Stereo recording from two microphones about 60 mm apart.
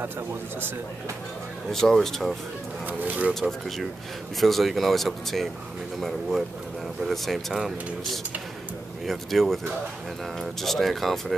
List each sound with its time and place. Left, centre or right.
1.7 s speech: centre
2.9 s speech: right
3.3 s speech: centre
9.0 s speech: centre